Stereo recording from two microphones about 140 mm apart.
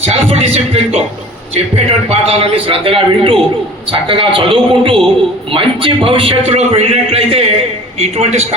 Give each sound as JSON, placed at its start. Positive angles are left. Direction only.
{"t": 0.1, "sound": "a man's voice", "side_deg": -45}